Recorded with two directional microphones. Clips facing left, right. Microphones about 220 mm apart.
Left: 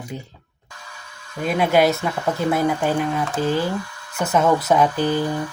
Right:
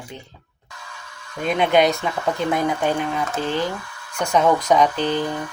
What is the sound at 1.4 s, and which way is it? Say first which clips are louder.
Speech: even; 5° left (ahead or behind).